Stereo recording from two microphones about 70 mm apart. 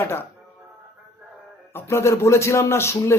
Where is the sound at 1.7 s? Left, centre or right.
Left.